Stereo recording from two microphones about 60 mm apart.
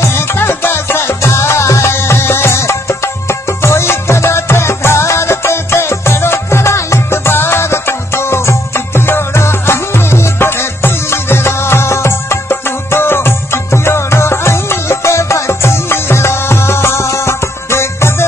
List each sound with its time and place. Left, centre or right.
0.0 s music: left